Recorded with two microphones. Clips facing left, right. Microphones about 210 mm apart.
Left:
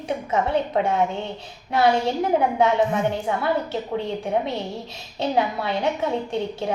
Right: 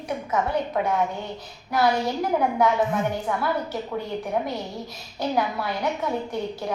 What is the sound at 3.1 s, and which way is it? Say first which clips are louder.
A woman's voice: left 2 dB; 25° left (ahead or behind).